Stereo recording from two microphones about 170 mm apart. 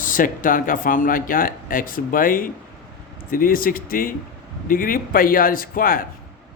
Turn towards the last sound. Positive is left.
turn(degrees=55)  # may be behind; listen again after turning